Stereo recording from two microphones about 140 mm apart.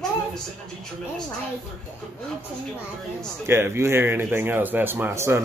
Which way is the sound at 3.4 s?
15° right (ahead or behind).